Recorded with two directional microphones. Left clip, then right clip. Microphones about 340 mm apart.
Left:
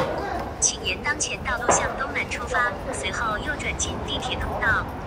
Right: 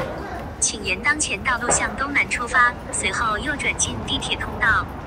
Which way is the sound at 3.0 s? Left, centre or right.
Right.